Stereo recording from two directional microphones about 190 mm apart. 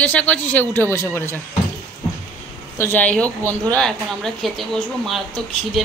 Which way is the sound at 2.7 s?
10° left (ahead or behind).